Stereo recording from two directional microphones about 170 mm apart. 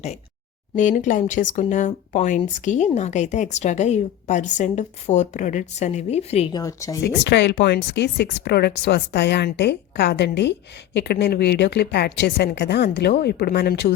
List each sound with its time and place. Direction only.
0.8 s a woman's voice: 50° left (ahead or behind)
6.5 s a woman's voice: 20° left (ahead or behind)
7.0 s a woman's voice: 85° left